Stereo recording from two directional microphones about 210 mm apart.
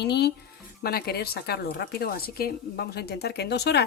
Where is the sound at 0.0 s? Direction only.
50° left (ahead or behind).